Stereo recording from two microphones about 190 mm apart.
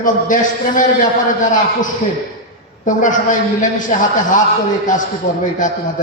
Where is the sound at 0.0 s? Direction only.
45° left (ahead or behind).